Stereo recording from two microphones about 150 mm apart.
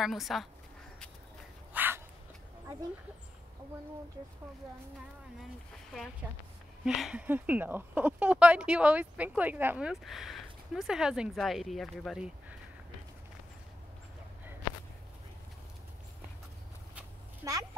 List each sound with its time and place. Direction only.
0.0 s speech: centre (ahead or behind)
1.7 s dog: 10° right (ahead or behind)
6.8 s speech: 5° right (ahead or behind)
17.4 s speech: 25° right (ahead or behind)